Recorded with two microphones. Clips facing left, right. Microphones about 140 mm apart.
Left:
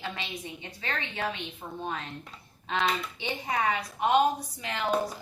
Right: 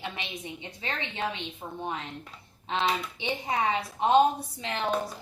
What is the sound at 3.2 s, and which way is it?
A woman's voice, 20° right (ahead or behind).